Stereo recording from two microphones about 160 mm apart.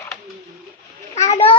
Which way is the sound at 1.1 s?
40° left (ahead or behind).